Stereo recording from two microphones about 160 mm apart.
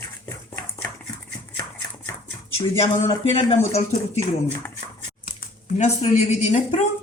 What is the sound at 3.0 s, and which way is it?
Speech, 35° left (ahead or behind).